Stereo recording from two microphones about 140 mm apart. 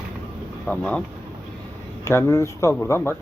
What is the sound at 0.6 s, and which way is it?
Speech, 10° left (ahead or behind).